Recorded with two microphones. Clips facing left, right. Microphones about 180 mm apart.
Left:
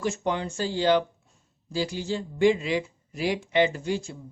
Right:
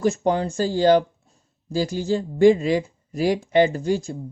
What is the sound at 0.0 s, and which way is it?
Speech, 40° right (ahead or behind).